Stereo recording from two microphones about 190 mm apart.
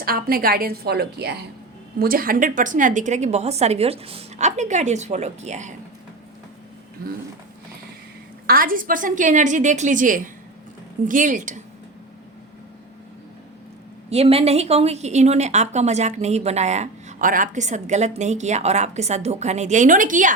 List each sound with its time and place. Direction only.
0.0 s a woman's voice: 50° right (ahead or behind)
8.4 s a woman's voice: 50° right (ahead or behind)
14.1 s a woman's voice: 30° right (ahead or behind)